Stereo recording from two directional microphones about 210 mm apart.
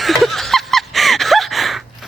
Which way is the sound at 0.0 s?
Centre (ahead or behind).